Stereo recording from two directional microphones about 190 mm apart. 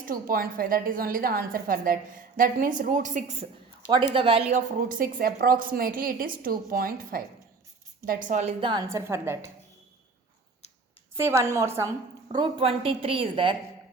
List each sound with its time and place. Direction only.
0.0 s a woman's voice: 50° right (ahead or behind)
3.8 s a woman's voice: 25° right (ahead or behind)
8.9 s a woman's voice: 15° right (ahead or behind)
11.2 s a woman's voice: 15° right (ahead or behind)
12.3 s a woman's voice: 25° right (ahead or behind)